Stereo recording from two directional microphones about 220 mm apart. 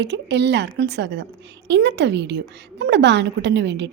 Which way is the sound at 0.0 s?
50° right (ahead or behind).